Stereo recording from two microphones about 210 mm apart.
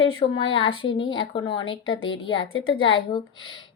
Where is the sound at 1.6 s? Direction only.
65° left (ahead or behind).